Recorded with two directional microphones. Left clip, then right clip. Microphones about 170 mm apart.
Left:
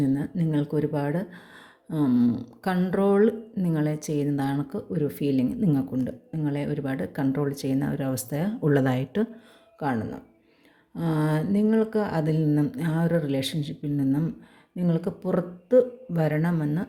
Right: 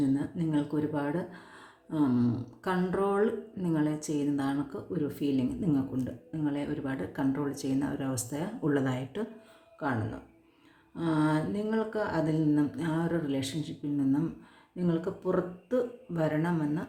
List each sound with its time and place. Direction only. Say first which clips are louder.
0.0 s speech: left 3 dB; 35° left (ahead or behind)
10.9 s speech: left 1 dB; 35° left (ahead or behind)